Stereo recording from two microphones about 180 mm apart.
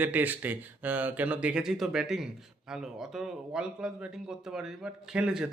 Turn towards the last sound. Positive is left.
turn(degrees=-5)  # may be behind; listen again after turning